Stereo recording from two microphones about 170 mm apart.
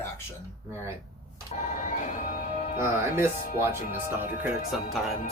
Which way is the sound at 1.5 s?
45° left (ahead or behind).